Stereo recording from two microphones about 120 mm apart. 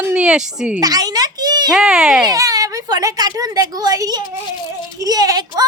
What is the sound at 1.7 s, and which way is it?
Speech, 5° right (ahead or behind).